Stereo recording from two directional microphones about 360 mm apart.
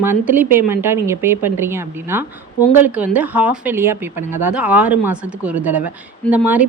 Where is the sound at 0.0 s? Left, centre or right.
Centre.